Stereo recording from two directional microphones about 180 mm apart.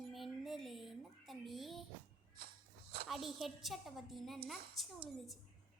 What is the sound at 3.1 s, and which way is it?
A woman's voice, centre (ahead or behind).